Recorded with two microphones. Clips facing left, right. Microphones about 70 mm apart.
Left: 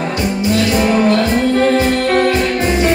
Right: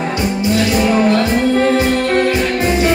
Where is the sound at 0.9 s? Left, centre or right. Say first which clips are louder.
Even; centre.